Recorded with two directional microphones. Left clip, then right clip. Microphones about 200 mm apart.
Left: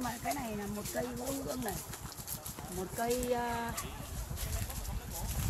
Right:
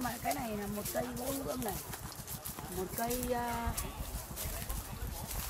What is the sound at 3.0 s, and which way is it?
Speech, 55° left (ahead or behind).